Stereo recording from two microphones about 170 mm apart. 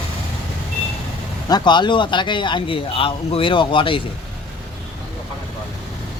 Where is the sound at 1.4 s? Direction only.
25° left (ahead or behind).